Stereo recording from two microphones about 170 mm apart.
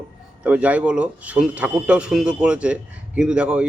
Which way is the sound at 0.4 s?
10° right (ahead or behind).